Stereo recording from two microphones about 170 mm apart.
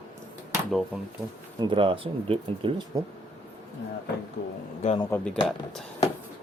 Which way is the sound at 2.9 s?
20° right (ahead or behind).